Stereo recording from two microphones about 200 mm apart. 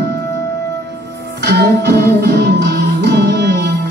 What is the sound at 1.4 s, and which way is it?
Music, 55° right (ahead or behind).